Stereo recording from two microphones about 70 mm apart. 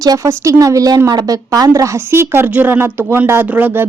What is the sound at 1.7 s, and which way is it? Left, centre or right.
Speech, right.